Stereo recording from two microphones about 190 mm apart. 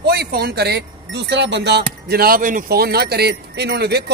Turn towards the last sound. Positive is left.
turn(degrees=-60)  # may be behind; listen again after turning